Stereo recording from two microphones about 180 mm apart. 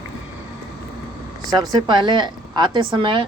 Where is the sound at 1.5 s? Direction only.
20° right (ahead or behind).